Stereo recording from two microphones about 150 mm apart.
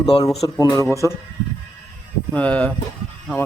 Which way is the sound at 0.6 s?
20° left (ahead or behind).